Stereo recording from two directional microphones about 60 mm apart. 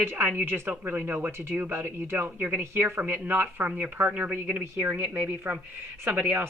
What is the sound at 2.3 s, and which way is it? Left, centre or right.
Speech, right.